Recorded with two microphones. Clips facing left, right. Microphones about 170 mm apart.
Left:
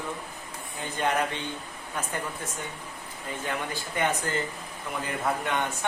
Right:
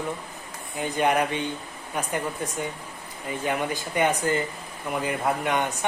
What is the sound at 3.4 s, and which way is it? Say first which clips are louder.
A man's voice: right 6 dB; 15° right (ahead or behind).